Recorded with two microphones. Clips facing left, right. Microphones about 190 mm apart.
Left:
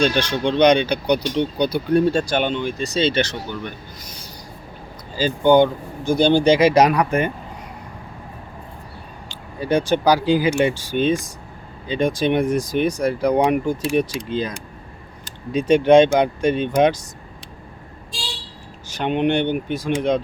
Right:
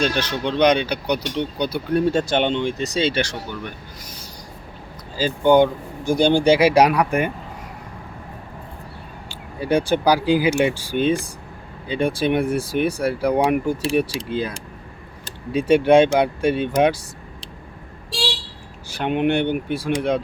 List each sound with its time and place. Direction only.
0.0 s speech: 5° right (ahead or behind)
2.0 s speech: 20° right (ahead or behind)
5.1 s speech: 5° right (ahead or behind)
9.3 s speech: 10° right (ahead or behind)
18.9 s speech: 10° right (ahead or behind)